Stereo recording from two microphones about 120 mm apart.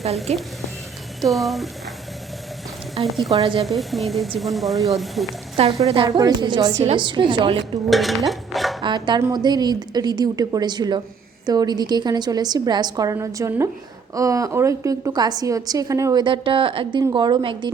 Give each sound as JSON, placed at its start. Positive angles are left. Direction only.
{"t": 0.3, "sound": "a woman's voice", "side_deg": -65}
{"t": 1.2, "sound": "speech", "side_deg": 0}
{"t": 3.1, "sound": "speech", "side_deg": 0}
{"t": 5.8, "sound": "a woman's voice", "side_deg": -45}
{"t": 6.1, "sound": "a woman's voice", "side_deg": -35}
{"t": 7.6, "sound": "dishes", "side_deg": 0}
{"t": 8.8, "sound": "a woman's voice", "side_deg": -40}
{"t": 16.2, "sound": "a woman's voice", "side_deg": -45}
{"t": 17.0, "sound": "a woman's voice", "side_deg": -35}